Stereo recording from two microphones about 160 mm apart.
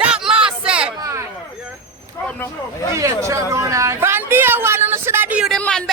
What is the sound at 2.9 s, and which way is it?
Speech, 20° right (ahead or behind).